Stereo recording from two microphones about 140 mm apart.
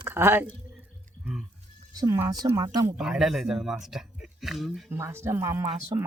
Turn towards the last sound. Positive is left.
turn(degrees=-20)  # may be behind; listen again after turning